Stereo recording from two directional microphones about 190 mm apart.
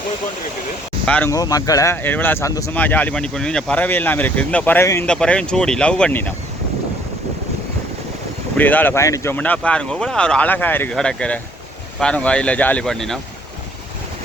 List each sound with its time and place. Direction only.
1.0 s speech: 10° left (ahead or behind)
8.5 s speech: 10° left (ahead or behind)